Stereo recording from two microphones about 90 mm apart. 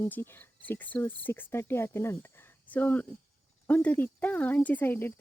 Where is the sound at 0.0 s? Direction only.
25° left (ahead or behind).